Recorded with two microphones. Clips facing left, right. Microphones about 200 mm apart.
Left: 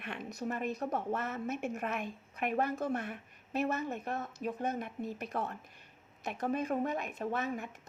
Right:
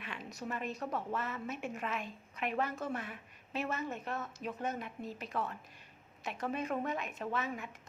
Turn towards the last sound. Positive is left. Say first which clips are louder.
# left 3 dB
turn(degrees=45)  # may be behind; listen again after turning